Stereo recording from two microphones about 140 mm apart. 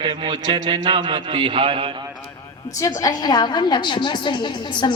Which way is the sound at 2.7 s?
25° left (ahead or behind).